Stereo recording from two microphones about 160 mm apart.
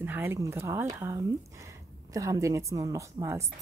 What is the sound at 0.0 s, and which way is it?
A woman's voice, 15° right (ahead or behind).